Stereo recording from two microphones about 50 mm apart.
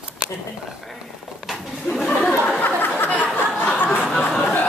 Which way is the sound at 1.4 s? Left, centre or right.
Centre.